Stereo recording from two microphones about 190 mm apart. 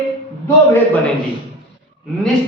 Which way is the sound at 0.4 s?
10° left (ahead or behind).